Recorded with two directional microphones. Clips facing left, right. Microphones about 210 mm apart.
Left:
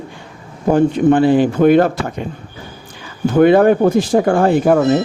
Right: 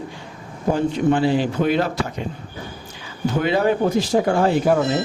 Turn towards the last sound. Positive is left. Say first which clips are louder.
# left 5 dB
turn(degrees=55)  # may be behind; listen again after turning